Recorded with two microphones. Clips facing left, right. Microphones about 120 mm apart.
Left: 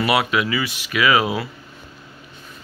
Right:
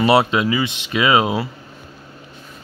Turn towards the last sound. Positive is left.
turn(degrees=-25)  # may be behind; listen again after turning